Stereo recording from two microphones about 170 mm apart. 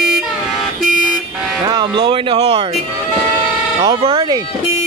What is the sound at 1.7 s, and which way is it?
Speech, 25° right (ahead or behind).